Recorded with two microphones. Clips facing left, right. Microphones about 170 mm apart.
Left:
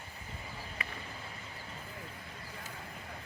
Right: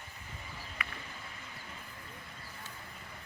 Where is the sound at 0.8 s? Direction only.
30° left (ahead or behind).